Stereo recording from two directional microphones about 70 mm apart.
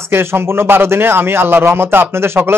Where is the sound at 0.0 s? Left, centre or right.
Right.